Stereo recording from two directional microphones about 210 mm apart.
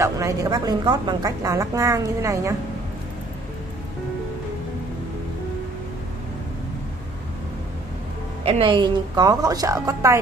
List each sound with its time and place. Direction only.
0.0 s a woman's voice: 15° right (ahead or behind)
8.5 s a woman's voice: 25° right (ahead or behind)